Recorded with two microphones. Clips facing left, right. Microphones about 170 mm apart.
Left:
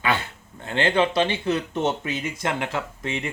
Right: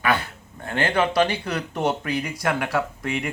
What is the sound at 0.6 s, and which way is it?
Speech, 20° left (ahead or behind).